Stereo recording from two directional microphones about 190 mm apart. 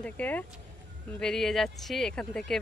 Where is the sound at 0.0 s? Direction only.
10° left (ahead or behind).